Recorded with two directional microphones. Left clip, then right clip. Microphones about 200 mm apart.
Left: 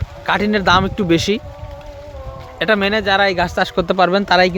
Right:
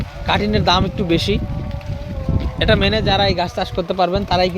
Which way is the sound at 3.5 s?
25° left (ahead or behind).